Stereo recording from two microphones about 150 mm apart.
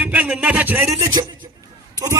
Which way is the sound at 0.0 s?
10° right (ahead or behind).